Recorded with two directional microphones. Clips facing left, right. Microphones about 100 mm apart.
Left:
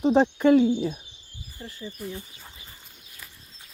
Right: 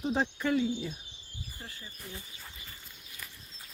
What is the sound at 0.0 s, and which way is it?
Speech, 70° left (ahead or behind).